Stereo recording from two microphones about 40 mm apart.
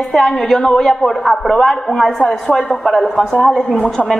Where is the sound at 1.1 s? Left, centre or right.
Centre.